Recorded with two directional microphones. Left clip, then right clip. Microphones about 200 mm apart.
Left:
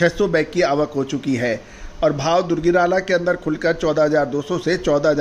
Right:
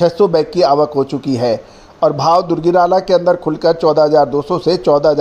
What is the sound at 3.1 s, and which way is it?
Speech, 10° left (ahead or behind).